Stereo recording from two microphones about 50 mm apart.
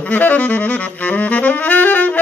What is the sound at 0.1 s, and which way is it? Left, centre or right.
Saxophone, left.